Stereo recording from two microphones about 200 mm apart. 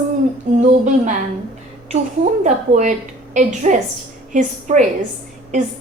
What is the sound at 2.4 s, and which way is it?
A woman's voice, 40° right (ahead or behind).